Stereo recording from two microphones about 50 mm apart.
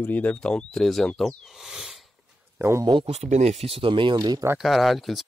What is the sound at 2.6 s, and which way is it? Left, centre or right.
Speech, right.